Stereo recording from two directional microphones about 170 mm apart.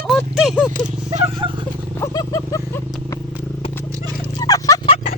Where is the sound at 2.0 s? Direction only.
20° left (ahead or behind).